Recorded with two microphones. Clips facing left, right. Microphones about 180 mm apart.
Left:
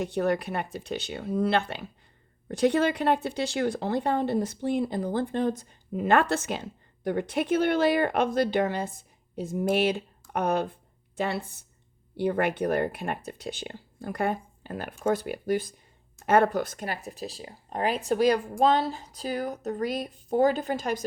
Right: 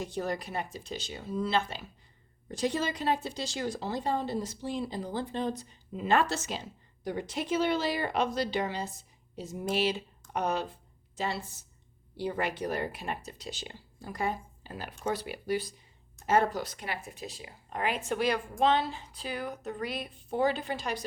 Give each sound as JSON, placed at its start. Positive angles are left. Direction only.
{"t": 0.0, "sound": "speech", "side_deg": 65}